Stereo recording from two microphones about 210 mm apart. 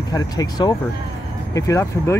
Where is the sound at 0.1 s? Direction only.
20° left (ahead or behind).